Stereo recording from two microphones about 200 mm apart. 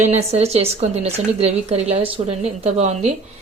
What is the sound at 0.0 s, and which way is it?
A woman's voice, 35° right (ahead or behind).